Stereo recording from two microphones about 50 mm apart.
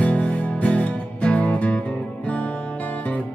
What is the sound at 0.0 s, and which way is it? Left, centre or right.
Music, left.